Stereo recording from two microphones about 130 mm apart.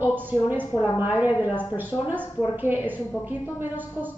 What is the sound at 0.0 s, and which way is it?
A woman's voice, 15° right (ahead or behind).